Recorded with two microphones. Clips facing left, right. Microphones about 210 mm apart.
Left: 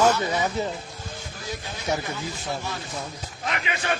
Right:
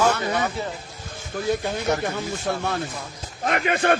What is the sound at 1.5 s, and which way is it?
Speech, 60° right (ahead or behind).